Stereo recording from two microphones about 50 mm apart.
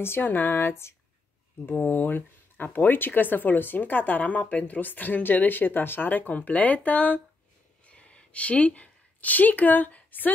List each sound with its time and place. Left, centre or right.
0.0 s speech: left
1.7 s speech: left
7.8 s a sound: left